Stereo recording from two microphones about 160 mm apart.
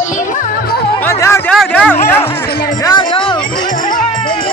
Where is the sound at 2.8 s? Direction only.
25° left (ahead or behind).